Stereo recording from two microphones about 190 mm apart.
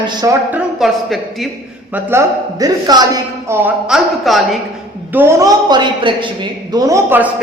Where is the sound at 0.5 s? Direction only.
Centre (ahead or behind).